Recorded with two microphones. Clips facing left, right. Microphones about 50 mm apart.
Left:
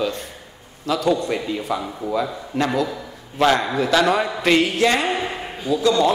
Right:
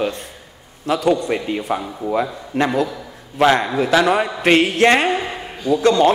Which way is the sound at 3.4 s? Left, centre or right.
Centre.